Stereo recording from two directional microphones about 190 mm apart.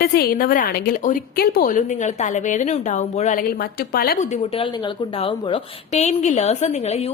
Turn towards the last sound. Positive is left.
turn(degrees=35)  # may be behind; listen again after turning